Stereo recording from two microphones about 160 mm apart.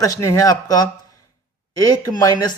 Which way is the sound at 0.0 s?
20° left (ahead or behind).